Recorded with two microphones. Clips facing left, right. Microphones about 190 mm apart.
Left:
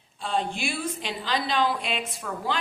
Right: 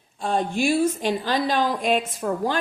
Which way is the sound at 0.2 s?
45° right (ahead or behind).